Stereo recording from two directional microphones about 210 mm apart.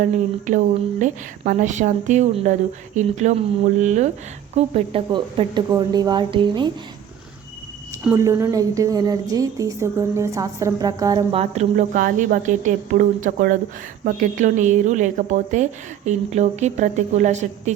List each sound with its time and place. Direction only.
0.0 s a woman's voice: 35° right (ahead or behind)
8.0 s a woman's voice: 15° right (ahead or behind); by 17.4 s 35° right (ahead or behind)